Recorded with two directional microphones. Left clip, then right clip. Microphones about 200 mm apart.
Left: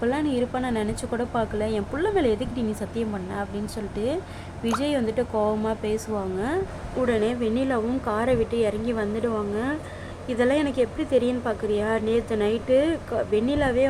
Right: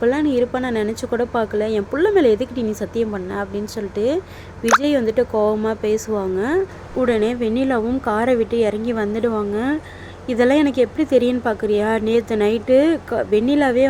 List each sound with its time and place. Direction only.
0.0 s a woman's voice: 15° right (ahead or behind)